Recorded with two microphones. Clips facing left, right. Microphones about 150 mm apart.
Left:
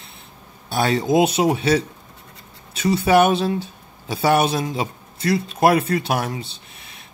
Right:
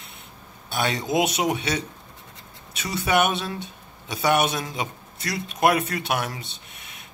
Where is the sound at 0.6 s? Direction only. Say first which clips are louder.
Left 6 dB; 35° left (ahead or behind).